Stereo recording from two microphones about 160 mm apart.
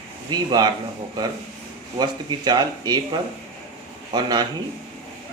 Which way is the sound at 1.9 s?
25° right (ahead or behind).